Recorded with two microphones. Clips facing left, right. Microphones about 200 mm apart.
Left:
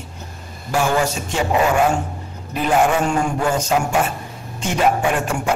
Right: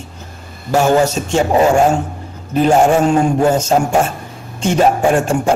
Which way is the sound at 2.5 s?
40° right (ahead or behind).